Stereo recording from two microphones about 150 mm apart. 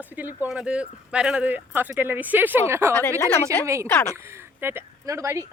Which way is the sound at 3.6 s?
20° right (ahead or behind).